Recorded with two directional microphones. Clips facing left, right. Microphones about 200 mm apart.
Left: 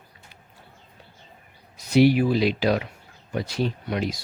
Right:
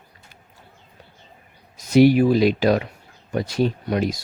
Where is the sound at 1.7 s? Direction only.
45° right (ahead or behind).